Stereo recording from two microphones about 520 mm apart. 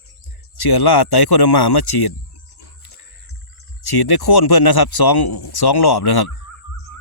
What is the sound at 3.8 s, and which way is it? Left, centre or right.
A man's voice, left.